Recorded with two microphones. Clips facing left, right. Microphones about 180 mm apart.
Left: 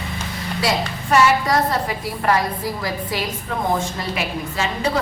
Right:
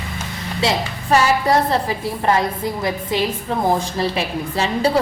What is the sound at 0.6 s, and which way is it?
A woman's voice, 25° right (ahead or behind).